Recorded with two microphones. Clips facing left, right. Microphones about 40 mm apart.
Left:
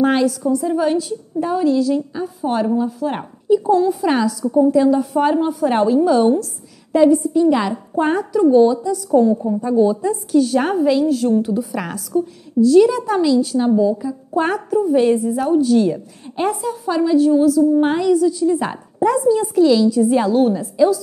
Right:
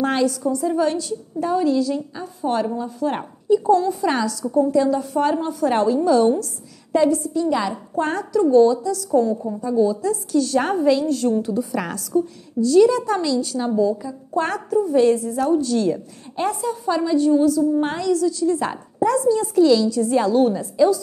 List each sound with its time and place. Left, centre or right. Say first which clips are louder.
0.0 s a woman's voice: left 4 dB; centre
9.6 s a woman's voice: left 2 dB; left
10.0 s a woman's voice: left 4 dB; centre